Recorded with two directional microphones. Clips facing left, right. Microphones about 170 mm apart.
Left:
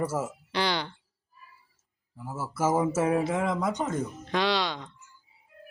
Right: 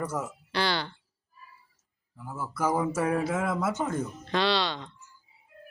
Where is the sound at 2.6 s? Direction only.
25° left (ahead or behind).